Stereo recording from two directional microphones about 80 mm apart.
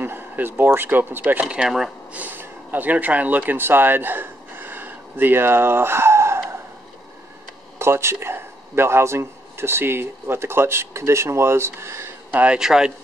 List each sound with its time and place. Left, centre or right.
0.0 s speech: right
1.5 s speech: centre
2.1 s speech: right
7.8 s a man's voice: right
12.3 s speech: centre
12.5 s speech: centre